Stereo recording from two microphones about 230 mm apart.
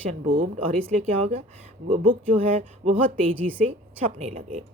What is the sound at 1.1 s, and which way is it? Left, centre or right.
Speech, right.